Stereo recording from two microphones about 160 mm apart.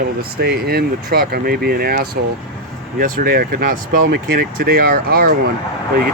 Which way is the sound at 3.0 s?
60° right (ahead or behind).